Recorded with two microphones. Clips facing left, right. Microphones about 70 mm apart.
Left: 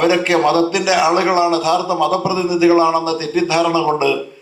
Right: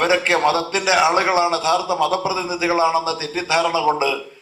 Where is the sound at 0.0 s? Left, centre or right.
Right.